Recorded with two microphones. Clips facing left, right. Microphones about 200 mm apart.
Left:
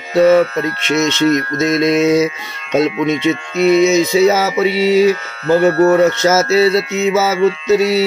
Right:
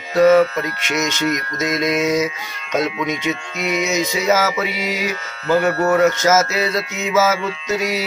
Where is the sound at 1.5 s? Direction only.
25° left (ahead or behind).